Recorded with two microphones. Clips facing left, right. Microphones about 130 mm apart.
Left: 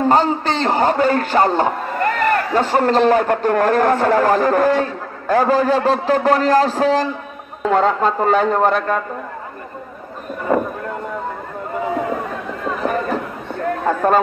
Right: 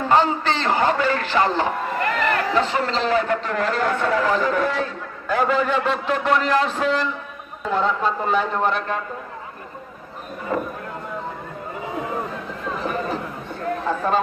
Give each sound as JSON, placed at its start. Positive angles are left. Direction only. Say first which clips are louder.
{"t": 0.1, "sound": "a man's voice", "louder": "left 2 dB", "side_deg": 40}
{"t": 7.7, "sound": "a man's voice", "louder": "left 5 dB", "side_deg": 50}
{"t": 12.6, "sound": "a sound", "louder": "left 5 dB", "side_deg": 50}
{"t": 13.8, "sound": "speech", "louder": "left 6 dB", "side_deg": 55}